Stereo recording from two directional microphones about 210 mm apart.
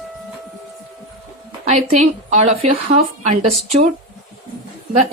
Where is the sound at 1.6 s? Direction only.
30° right (ahead or behind).